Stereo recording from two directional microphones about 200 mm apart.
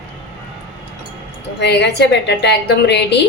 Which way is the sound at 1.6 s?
60° left (ahead or behind).